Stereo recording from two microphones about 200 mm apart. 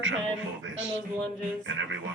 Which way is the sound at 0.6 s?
75° right (ahead or behind).